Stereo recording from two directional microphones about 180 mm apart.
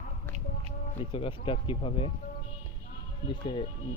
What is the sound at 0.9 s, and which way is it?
Speech, 30° left (ahead or behind).